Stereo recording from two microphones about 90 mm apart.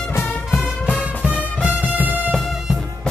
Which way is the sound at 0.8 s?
15° left (ahead or behind).